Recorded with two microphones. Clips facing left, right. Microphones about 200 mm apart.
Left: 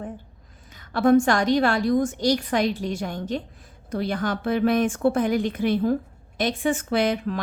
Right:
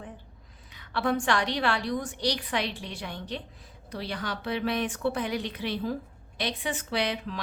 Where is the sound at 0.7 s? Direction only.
45° left (ahead or behind).